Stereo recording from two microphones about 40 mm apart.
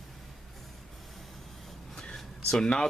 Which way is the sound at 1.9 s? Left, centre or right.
Centre.